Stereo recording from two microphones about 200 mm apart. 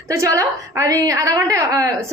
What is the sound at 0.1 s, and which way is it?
A woman's voice, 15° right (ahead or behind).